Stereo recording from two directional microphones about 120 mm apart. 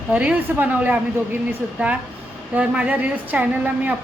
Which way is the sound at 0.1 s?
10° right (ahead or behind).